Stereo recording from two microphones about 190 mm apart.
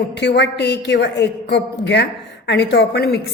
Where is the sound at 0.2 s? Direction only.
65° left (ahead or behind).